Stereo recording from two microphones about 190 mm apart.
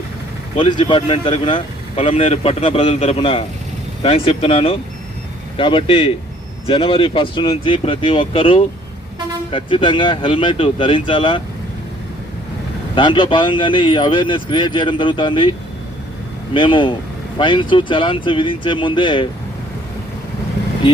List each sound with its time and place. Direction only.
0.8 s speech: 25° left (ahead or behind)
13.0 s speech: 25° left (ahead or behind)
16.6 s speech: 25° left (ahead or behind)